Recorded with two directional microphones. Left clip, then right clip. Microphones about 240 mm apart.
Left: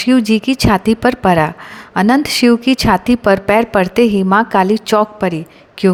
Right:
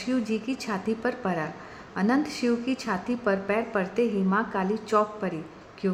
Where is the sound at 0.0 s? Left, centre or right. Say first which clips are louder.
Left 15 dB; left.